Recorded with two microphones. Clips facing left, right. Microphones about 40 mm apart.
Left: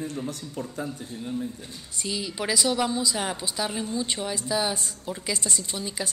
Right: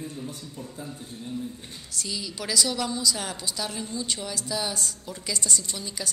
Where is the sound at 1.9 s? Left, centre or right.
Left.